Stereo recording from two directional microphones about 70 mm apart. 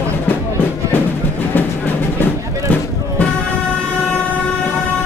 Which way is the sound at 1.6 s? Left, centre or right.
Left.